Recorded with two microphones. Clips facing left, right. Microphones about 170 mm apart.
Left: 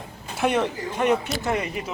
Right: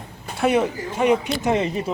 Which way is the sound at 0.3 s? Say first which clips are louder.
Right 3 dB; 5° right (ahead or behind).